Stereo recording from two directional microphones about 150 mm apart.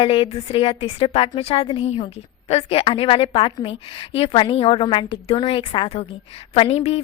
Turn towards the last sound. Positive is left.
turn(degrees=45)  # may be behind; listen again after turning